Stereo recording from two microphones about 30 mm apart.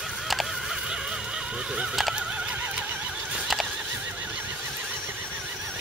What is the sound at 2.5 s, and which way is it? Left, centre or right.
Neigh, right.